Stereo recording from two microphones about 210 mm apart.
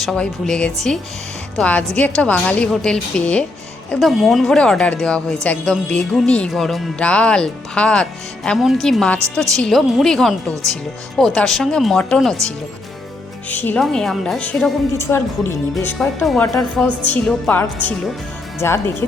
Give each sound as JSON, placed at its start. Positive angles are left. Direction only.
{"t": 0.0, "sound": "speech", "side_deg": 0}
{"t": 16.9, "sound": "a woman's voice", "side_deg": -25}
{"t": 17.2, "sound": "speech", "side_deg": 5}